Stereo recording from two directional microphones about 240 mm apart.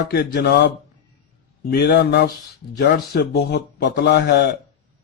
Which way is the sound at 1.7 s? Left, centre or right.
Left.